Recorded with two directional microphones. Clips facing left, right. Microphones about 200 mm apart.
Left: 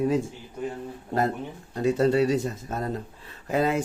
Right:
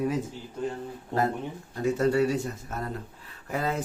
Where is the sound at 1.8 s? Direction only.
20° left (ahead or behind).